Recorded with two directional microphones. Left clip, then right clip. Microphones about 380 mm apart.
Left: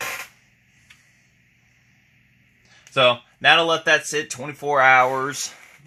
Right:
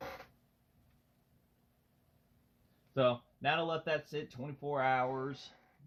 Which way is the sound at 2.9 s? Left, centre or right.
Left.